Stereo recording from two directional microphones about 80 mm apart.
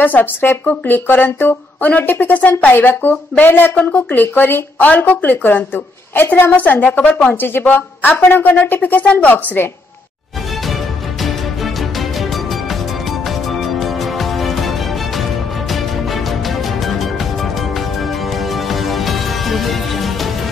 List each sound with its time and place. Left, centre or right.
0.0 s speech: left
13.5 s music: centre